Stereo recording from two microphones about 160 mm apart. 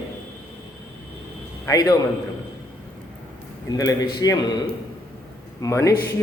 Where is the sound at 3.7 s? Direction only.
20° left (ahead or behind).